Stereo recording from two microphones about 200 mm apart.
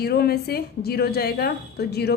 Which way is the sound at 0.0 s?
50° left (ahead or behind).